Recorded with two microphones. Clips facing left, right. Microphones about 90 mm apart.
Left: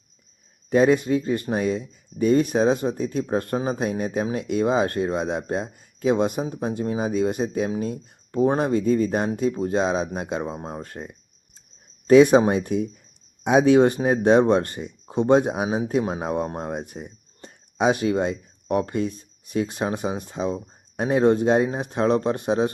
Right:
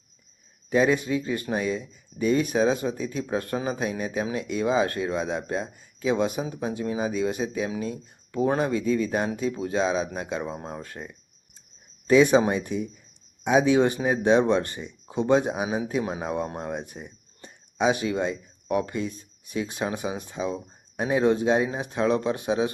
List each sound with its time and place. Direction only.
0.7 s speech: 50° left (ahead or behind)
10.7 s speech: 40° left (ahead or behind)
16.5 s speech: 30° left (ahead or behind)
16.8 s speech: 50° left (ahead or behind)